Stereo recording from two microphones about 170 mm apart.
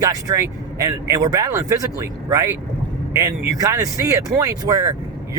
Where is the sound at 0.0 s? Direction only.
20° right (ahead or behind).